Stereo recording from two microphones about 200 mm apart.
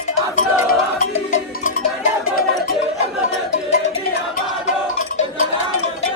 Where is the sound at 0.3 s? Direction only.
40° left (ahead or behind).